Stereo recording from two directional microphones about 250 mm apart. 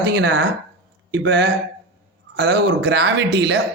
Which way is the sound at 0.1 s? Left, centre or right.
Right.